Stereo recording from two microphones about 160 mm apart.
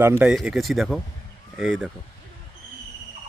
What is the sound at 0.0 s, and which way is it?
Speech, 15° right (ahead or behind).